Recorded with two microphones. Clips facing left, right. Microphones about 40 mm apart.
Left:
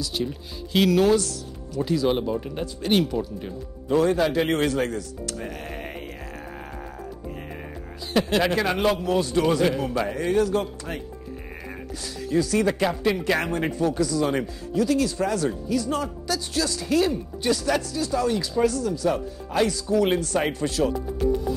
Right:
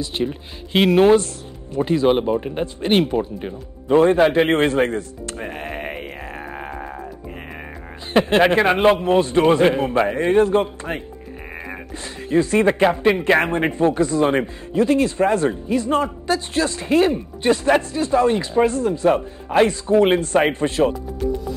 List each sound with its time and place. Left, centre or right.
0.0 s speech: right
8.1 s speech: right